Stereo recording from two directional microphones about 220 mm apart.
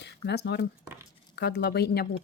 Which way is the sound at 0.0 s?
50° left (ahead or behind).